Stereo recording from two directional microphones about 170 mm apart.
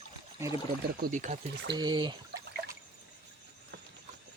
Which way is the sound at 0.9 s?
55° right (ahead or behind).